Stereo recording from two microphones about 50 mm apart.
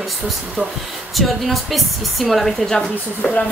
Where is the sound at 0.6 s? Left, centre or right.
Right.